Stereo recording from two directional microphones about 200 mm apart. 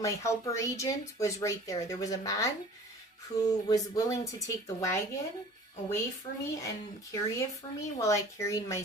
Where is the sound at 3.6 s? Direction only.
15° left (ahead or behind).